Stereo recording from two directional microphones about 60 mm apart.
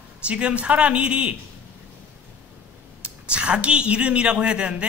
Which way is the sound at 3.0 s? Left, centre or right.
Centre.